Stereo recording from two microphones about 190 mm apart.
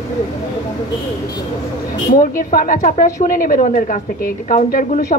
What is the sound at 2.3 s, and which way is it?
A woman's voice, 45° left (ahead or behind).